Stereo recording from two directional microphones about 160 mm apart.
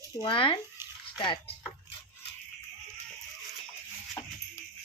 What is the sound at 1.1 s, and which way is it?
Speech, 30° left (ahead or behind).